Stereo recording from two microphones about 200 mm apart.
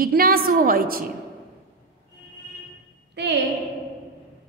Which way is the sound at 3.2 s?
60° right (ahead or behind).